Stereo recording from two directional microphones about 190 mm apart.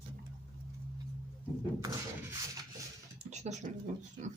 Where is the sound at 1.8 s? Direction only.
20° right (ahead or behind).